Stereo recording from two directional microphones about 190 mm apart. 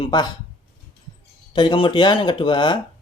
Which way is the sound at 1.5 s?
25° left (ahead or behind).